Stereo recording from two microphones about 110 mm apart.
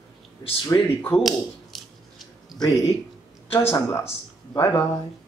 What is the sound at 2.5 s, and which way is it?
Speech, 35° left (ahead or behind).